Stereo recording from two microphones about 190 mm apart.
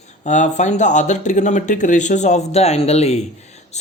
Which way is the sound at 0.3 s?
40° left (ahead or behind).